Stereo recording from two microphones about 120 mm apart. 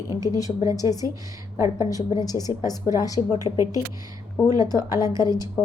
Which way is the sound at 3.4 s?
25° right (ahead or behind).